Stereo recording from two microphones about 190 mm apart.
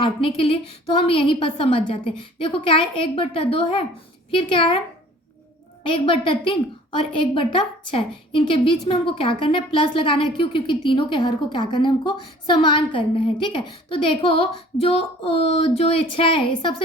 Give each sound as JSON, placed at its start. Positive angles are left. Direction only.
{"t": 0.0, "sound": "a woman's voice", "side_deg": 30}
{"t": 5.8, "sound": "a woman's voice", "side_deg": 25}